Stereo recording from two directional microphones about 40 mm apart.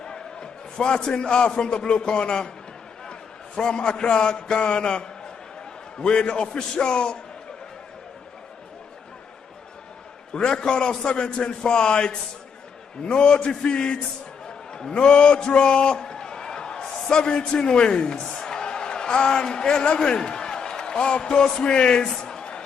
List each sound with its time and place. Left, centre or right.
0.0 s a man's voice: left
10.3 s a man's voice: left
14.7 s a sound: centre
17.1 s a man's voice: left
18.2 s a sound: centre
18.5 s a man's voice: left